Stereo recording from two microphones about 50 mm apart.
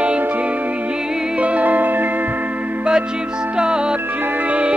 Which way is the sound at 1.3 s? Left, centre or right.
Right.